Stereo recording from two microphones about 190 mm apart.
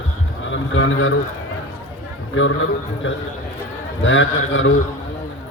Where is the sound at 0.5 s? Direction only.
90° left.